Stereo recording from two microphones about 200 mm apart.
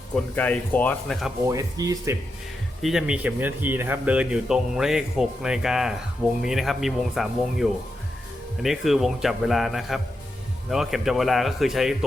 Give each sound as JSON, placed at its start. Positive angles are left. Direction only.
{"t": 0.3, "sound": "speech", "side_deg": 10}
{"t": 1.5, "sound": "speech", "side_deg": -15}
{"t": 2.8, "sound": "speech", "side_deg": -5}